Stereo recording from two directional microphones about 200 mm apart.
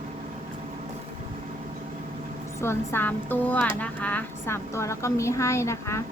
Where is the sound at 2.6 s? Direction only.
10° left (ahead or behind).